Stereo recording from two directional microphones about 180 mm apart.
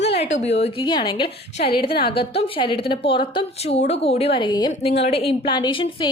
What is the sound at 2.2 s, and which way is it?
A woman's voice, 30° left (ahead or behind).